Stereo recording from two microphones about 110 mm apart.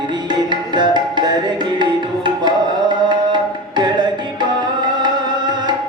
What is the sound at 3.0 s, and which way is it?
Tabla, 40° right (ahead or behind).